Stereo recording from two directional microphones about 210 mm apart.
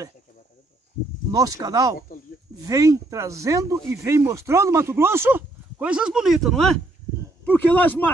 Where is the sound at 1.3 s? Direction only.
15° right (ahead or behind).